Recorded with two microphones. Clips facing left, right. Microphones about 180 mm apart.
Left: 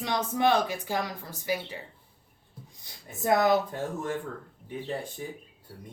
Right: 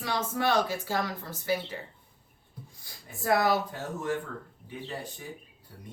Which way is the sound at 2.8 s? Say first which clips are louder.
Left 1 dB; 20° left (ahead or behind).